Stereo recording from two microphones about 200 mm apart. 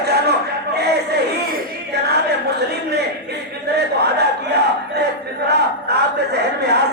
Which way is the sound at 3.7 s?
55° right (ahead or behind).